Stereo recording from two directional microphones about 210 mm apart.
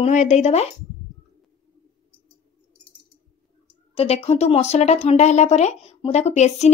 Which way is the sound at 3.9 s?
30° left (ahead or behind).